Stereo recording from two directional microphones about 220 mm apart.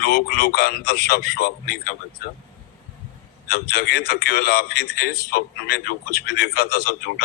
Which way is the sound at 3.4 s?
45° left (ahead or behind).